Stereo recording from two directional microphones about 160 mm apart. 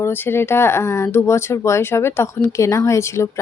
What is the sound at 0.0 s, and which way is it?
Speech, 15° left (ahead or behind).